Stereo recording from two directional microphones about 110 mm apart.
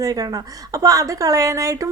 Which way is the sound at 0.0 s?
35° right (ahead or behind).